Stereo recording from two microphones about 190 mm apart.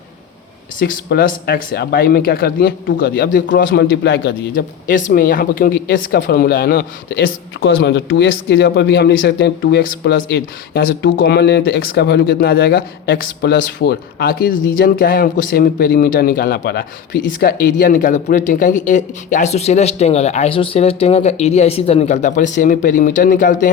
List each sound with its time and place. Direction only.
0.8 s speech: 45° left (ahead or behind)
3.7 s speech: 65° left (ahead or behind)
4.5 s speech: 45° left (ahead or behind)
7.6 s speech: 85° left; by 23.6 s 45° left (ahead or behind)